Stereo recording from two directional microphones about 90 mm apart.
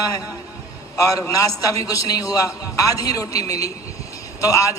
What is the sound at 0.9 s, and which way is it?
A man's voice, 35° left (ahead or behind).